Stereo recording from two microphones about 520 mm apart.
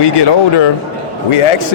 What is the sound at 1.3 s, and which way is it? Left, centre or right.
Speech, left.